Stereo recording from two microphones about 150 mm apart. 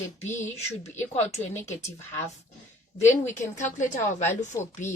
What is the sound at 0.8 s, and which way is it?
Speech, 45° left (ahead or behind).